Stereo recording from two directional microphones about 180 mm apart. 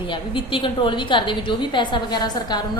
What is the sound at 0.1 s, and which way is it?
A woman's voice, 25° left (ahead or behind).